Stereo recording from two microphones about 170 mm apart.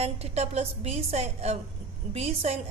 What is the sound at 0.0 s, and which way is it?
A woman's voice, 40° right (ahead or behind).